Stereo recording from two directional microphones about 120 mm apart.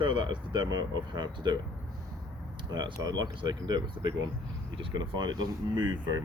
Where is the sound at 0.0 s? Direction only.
40° right (ahead or behind).